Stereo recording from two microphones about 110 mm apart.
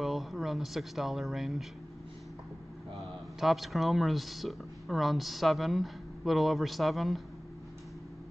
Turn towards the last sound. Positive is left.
turn(degrees=0)  # may be behind; listen again after turning